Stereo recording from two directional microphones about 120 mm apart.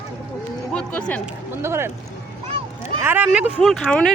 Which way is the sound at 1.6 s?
20° right (ahead or behind).